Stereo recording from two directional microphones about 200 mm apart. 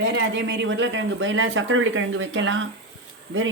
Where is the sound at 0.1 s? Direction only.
65° right (ahead or behind).